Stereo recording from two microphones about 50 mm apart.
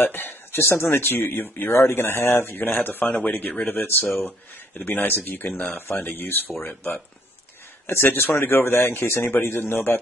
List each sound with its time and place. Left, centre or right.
0.0 s speech: left
7.8 s speech: left